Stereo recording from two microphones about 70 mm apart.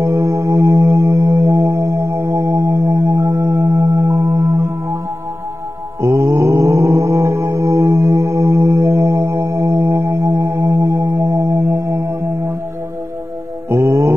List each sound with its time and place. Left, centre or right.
0.0 s music: right
3.7 s singing bowl: right
4.6 s music: right
5.9 s mantra: right
13.7 s music: right